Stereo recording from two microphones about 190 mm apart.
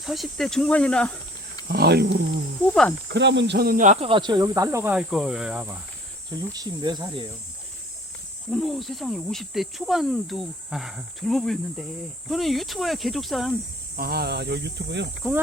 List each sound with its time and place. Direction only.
0.0 s speech: centre (ahead or behind)
1.6 s speech: 55° right (ahead or behind)
2.6 s speech: 5° left (ahead or behind)
3.1 s speech: 65° right (ahead or behind); by 4.1 s 40° right (ahead or behind)
4.1 s speech: 25° right (ahead or behind)
8.4 s speech: centre (ahead or behind)
13.9 s speech: 55° right (ahead or behind)
15.2 s speech: 5° right (ahead or behind)